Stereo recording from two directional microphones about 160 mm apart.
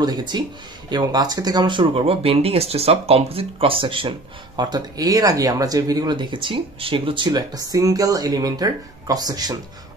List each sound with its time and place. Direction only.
0.0 s speech: 25° right (ahead or behind)